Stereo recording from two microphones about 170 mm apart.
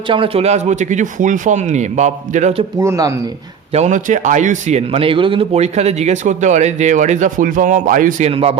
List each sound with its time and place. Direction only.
0.1 s a man's voice: 35° right (ahead or behind)
2.7 s speech: 15° right (ahead or behind)
3.7 s a man's voice: 45° right (ahead or behind)
8.3 s speech: 35° right (ahead or behind)